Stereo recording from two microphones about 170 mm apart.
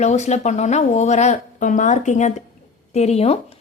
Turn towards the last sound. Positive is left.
turn(degrees=40)  # may be behind; listen again after turning